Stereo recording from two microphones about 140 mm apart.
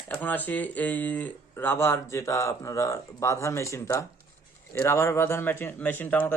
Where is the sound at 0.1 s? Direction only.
10° left (ahead or behind).